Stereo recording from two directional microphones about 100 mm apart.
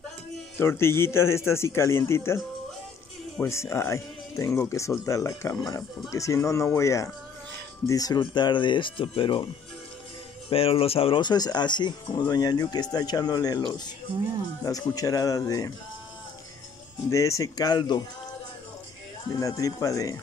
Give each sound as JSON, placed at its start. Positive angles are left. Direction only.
{"t": 0.6, "sound": "a man's voice", "side_deg": 25}
{"t": 3.4, "sound": "a man's voice", "side_deg": 30}
{"t": 10.5, "sound": "speech", "side_deg": 70}
{"t": 11.2, "sound": "speech", "side_deg": 45}
{"t": 14.6, "sound": "speech", "side_deg": 35}
{"t": 17.1, "sound": "speech", "side_deg": 30}
{"t": 19.4, "sound": "speech", "side_deg": 35}